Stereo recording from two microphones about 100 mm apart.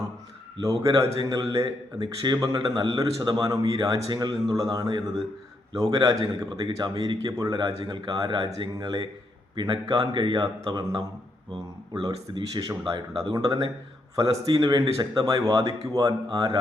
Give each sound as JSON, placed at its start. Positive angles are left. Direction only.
{"t": 0.6, "sound": "a man's voice", "side_deg": -35}